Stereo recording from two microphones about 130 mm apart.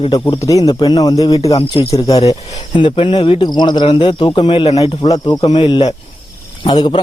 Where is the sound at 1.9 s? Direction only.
25° left (ahead or behind).